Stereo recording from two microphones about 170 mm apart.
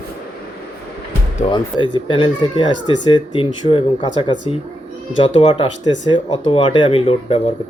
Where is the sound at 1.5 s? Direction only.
25° left (ahead or behind).